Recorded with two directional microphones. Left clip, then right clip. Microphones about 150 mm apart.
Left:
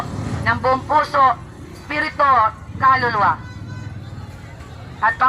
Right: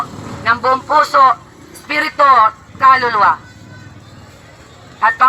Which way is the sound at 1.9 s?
50° right (ahead or behind).